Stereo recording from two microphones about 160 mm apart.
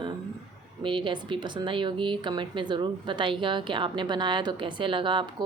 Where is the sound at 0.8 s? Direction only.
30° right (ahead or behind).